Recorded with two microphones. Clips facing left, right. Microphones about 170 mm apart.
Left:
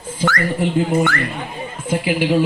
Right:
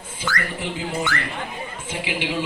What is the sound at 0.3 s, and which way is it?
Speech, 50° left (ahead or behind).